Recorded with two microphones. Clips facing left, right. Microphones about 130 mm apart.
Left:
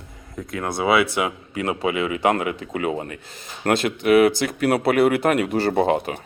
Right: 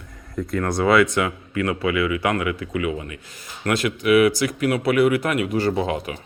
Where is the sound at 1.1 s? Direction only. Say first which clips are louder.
Right 1 dB; 15° left (ahead or behind).